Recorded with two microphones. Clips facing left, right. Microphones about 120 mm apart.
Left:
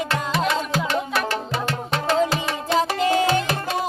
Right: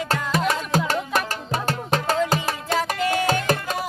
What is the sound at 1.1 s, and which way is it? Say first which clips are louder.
Music: left 1 dB; 40° right (ahead or behind).